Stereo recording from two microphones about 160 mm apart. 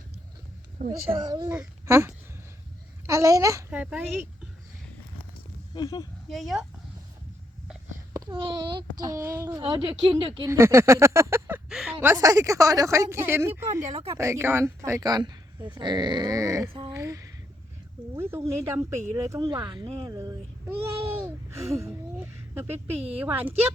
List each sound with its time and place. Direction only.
0.9 s a woman's voice: 25° right (ahead or behind)
1.5 s a child's voice: 15° right (ahead or behind)
3.7 s speech: 10° right (ahead or behind)
5.7 s speech: 25° left (ahead or behind)
6.2 s speech: centre (ahead or behind)
8.1 s a woman's voice: 25° right (ahead or behind)
9.6 s speech: 30° right (ahead or behind)
10.4 s speech: 15° right (ahead or behind)
11.9 s a woman's voice: 20° right (ahead or behind)